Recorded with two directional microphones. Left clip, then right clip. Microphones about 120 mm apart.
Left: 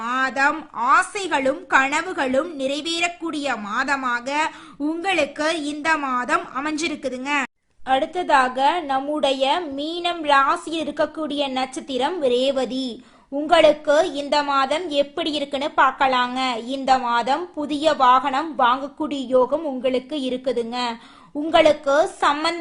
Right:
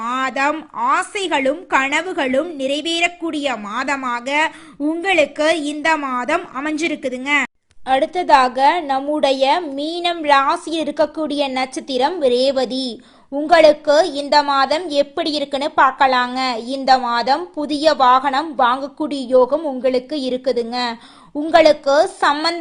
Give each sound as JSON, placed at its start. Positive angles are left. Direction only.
{"t": 0.1, "sound": "a sound", "side_deg": -20}
{"t": 0.8, "sound": "a woman's voice", "side_deg": -15}
{"t": 7.9, "sound": "a woman's voice", "side_deg": -35}